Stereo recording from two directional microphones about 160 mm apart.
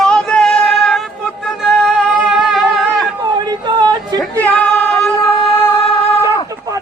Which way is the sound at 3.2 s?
25° right (ahead or behind).